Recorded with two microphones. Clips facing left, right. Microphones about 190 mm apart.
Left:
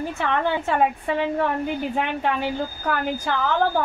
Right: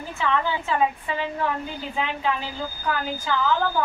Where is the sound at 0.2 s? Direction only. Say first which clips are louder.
Even; 60° left (ahead or behind).